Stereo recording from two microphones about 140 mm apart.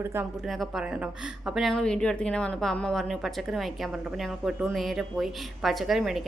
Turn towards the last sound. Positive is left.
turn(degrees=-5)  # may be behind; listen again after turning